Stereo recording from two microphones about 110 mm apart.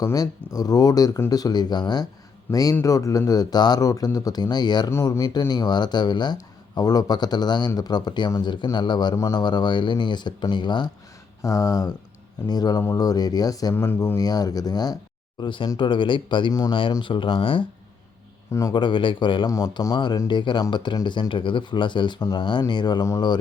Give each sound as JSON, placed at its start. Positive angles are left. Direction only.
{"t": 0.0, "sound": "a man's voice", "side_deg": 35}
{"t": 11.4, "sound": "a man's voice", "side_deg": 30}
{"t": 13.7, "sound": "speech", "side_deg": 20}
{"t": 14.2, "sound": "a man's voice", "side_deg": 35}
{"t": 15.4, "sound": "speech", "side_deg": 45}
{"t": 16.5, "sound": "a man's voice", "side_deg": 35}
{"t": 16.9, "sound": "speech", "side_deg": 50}
{"t": 18.7, "sound": "speech", "side_deg": 45}
{"t": 19.5, "sound": "a man's voice", "side_deg": 35}